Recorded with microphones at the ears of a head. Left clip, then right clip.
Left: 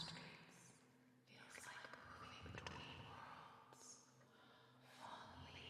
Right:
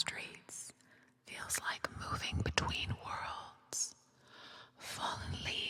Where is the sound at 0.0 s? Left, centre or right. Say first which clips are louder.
Right 14 dB; right.